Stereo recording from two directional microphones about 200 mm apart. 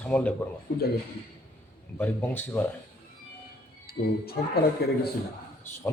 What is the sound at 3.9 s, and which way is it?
Speech, 50° left (ahead or behind).